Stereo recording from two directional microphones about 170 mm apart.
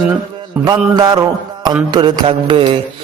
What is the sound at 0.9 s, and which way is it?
A man's voice, 25° right (ahead or behind).